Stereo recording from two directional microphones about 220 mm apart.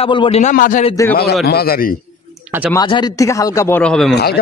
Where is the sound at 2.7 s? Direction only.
20° left (ahead or behind); by 4.1 s centre (ahead or behind).